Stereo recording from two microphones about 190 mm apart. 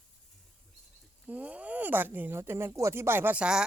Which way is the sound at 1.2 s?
10° right (ahead or behind).